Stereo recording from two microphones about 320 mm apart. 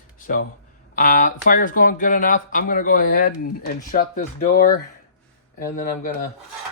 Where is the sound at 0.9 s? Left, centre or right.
Left.